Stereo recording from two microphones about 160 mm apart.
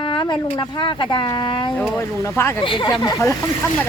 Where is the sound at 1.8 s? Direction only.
15° left (ahead or behind).